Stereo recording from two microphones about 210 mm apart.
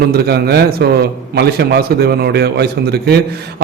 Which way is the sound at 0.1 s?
50° right (ahead or behind).